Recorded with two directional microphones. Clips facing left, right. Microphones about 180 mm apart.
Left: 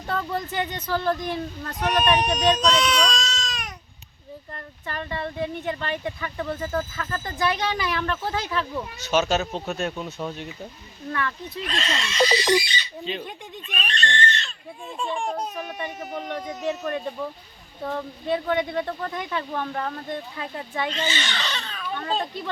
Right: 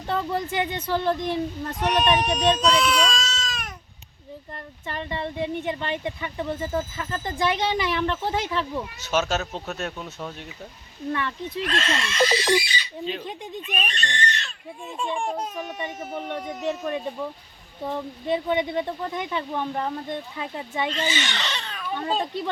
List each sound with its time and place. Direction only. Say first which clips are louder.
0.1 s speech: right 2 dB; 25° right (ahead or behind)
1.8 s speech: even; centre (ahead or behind)
4.9 s speech: even; 20° right (ahead or behind)
8.7 s speech: left 2 dB; 5° right (ahead or behind)
11.1 s speech: even; 25° right (ahead or behind)
11.6 s speech: right 2 dB; 5° right (ahead or behind)
20.9 s speech: right 1 dB; 5° right (ahead or behind)
21.3 s speech: even; 20° right (ahead or behind)